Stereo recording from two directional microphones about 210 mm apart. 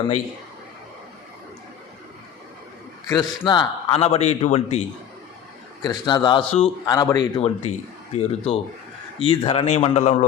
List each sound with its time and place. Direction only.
3.1 s a man's voice: 20° left (ahead or behind)
5.8 s a man's voice: 20° left (ahead or behind)